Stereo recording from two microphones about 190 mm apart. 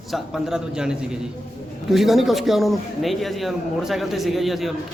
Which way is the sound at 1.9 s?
Centre (ahead or behind).